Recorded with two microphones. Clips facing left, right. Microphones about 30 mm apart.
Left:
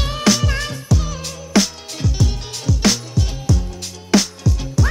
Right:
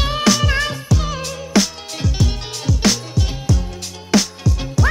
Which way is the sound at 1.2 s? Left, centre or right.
Centre.